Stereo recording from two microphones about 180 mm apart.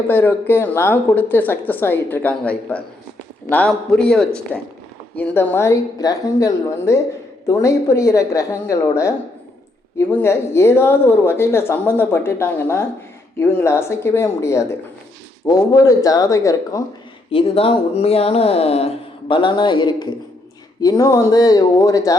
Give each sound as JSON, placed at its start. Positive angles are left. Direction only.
{"t": 0.1, "sound": "a woman's voice", "side_deg": 10}
{"t": 10.2, "sound": "a woman's voice", "side_deg": 15}
{"t": 17.3, "sound": "speech", "side_deg": 30}